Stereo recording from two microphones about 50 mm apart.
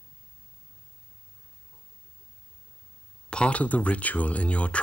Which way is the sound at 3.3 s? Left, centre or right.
Left.